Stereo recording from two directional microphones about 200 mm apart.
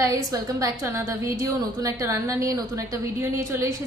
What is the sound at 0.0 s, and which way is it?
A woman's voice, 15° right (ahead or behind).